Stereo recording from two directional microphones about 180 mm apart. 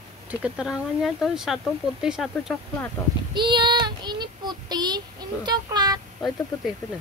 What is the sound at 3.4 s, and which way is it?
Child singing, 25° right (ahead or behind).